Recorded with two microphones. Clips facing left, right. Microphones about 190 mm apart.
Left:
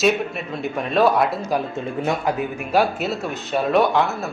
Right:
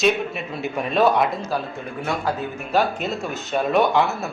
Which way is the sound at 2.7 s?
10° left (ahead or behind).